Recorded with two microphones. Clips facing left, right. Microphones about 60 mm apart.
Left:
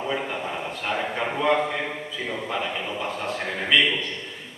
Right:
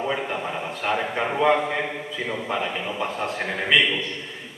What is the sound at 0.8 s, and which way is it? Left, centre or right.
A man's voice, centre.